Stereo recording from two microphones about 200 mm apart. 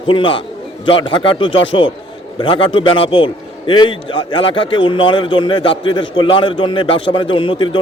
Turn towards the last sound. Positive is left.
turn(degrees=25)  # may be behind; listen again after turning